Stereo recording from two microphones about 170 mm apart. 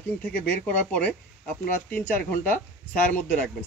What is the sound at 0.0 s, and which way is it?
Speech, 10° left (ahead or behind).